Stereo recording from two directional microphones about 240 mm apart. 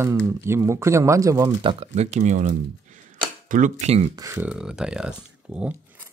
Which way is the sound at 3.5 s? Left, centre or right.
Right.